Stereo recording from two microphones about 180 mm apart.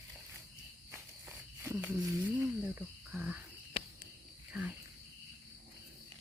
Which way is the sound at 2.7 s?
10° right (ahead or behind).